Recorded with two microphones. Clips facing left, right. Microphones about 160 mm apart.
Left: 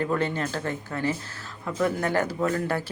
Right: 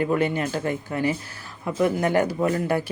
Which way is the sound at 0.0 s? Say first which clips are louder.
Right 4 dB; 10° right (ahead or behind).